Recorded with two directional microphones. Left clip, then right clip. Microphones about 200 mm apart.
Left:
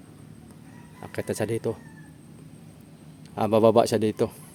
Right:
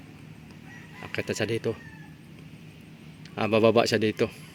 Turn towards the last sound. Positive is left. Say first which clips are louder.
# left 2 dB
turn(degrees=10)  # may be behind; listen again after turning